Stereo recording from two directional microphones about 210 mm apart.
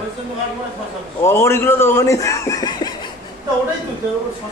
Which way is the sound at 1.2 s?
10° left (ahead or behind).